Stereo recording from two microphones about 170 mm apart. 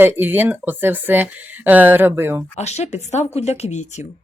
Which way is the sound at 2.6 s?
40° left (ahead or behind).